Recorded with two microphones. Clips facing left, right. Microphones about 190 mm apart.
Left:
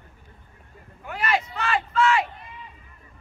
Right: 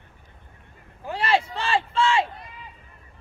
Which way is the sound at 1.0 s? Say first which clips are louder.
Right 3 dB; 30° right (ahead or behind).